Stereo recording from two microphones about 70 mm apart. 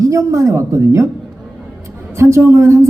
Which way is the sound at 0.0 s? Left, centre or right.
Right.